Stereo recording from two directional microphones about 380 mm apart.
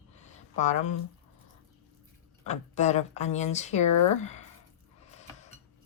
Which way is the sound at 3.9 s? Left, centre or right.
Left.